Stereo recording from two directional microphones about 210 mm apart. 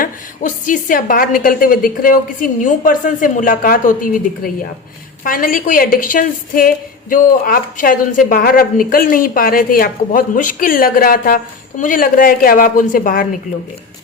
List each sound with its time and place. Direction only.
0.0 s a woman's voice: 40° left (ahead or behind)